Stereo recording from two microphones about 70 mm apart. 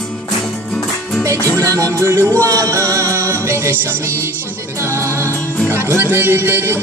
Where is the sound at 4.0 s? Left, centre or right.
Right.